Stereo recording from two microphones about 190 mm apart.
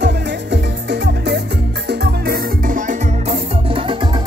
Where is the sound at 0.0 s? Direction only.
65° right (ahead or behind); by 3.3 s 45° right (ahead or behind).